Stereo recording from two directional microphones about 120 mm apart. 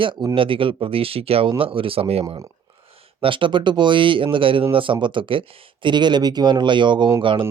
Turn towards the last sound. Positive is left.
turn(degrees=-45)  # may be behind; listen again after turning